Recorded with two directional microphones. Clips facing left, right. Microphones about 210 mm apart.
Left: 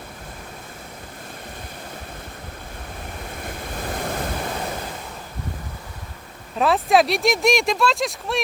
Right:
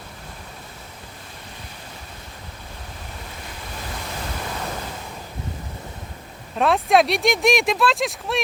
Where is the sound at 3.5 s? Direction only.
50° left (ahead or behind).